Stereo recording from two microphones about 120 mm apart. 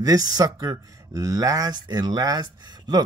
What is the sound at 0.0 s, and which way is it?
Speech, 30° right (ahead or behind).